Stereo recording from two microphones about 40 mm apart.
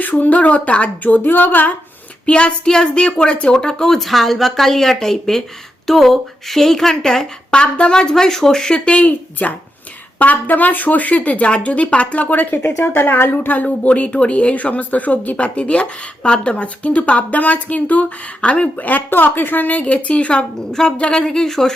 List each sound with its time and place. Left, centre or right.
0.0 s speech: left
1.1 s a woman's voice: left
2.2 s a woman's voice: left
3.5 s a woman's voice: left
3.9 s a woman's voice: centre
8.7 s a woman's voice: left
9.0 s a woman's voice: left
12.3 s a woman's voice: left
18.8 s a woman's voice: left; by 21.8 s centre